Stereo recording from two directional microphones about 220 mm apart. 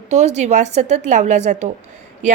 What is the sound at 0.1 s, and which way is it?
A woman's voice, 30° right (ahead or behind).